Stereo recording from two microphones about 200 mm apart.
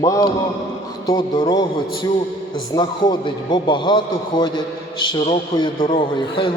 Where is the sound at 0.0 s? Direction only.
15° left (ahead or behind).